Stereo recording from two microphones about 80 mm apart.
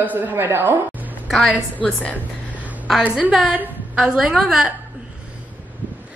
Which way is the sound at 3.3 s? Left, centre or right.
Centre.